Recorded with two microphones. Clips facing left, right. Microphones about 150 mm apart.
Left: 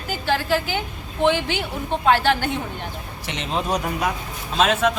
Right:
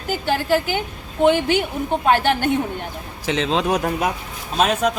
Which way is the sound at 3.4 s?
90° right.